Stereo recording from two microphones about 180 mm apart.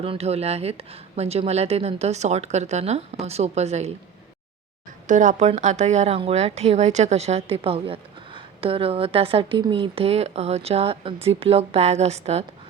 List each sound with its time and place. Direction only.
0.0 s a woman's voice: 35° right (ahead or behind)
5.0 s a woman's voice: 45° right (ahead or behind)